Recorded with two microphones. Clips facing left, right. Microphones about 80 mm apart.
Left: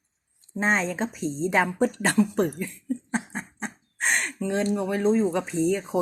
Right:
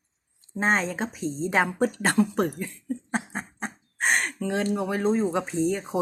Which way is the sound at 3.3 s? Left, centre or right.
Right.